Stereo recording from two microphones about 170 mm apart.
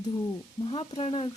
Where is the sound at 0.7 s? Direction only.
30° left (ahead or behind).